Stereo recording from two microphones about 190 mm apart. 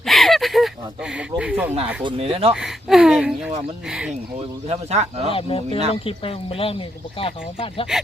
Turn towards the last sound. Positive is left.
turn(degrees=30)  # may be behind; listen again after turning